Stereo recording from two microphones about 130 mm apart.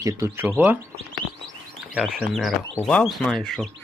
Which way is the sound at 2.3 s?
Centre (ahead or behind).